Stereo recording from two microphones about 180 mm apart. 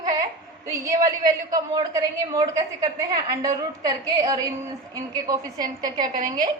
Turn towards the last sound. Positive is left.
turn(degrees=-25)  # may be behind; listen again after turning